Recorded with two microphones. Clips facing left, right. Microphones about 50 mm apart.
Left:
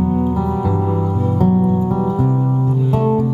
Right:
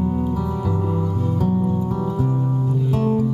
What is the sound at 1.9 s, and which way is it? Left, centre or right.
Music, centre.